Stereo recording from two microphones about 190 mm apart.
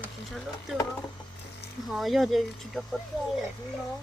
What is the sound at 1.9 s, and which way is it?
Speech, centre (ahead or behind).